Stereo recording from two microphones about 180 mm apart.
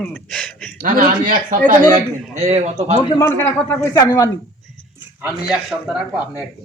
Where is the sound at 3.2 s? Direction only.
15° left (ahead or behind).